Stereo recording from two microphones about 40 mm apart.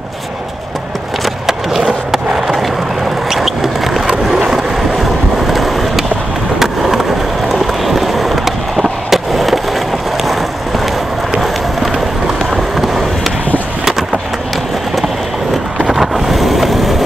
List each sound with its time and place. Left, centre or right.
1.2 s skateboard: centre
3.3 s vehicle: centre
4.3 s boat: centre
5.5 s skateboard: centre
12.7 s skateboard: centre
15.9 s a sound: centre